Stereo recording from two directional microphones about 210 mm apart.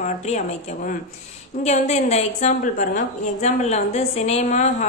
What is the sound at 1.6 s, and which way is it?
A woman's voice, 35° left (ahead or behind).